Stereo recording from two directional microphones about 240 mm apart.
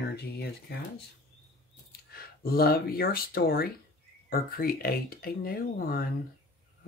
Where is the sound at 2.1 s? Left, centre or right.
Left.